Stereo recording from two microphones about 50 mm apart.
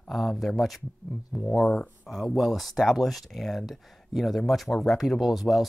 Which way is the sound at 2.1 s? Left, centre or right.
Centre.